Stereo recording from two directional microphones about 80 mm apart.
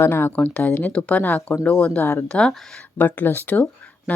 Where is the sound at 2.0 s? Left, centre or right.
Left.